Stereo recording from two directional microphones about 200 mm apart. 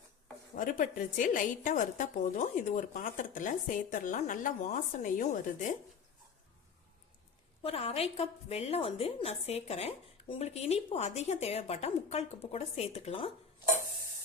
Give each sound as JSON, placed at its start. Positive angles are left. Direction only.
{"t": 0.5, "sound": "a woman's voice", "side_deg": 40}
{"t": 7.6, "sound": "a woman's voice", "side_deg": 30}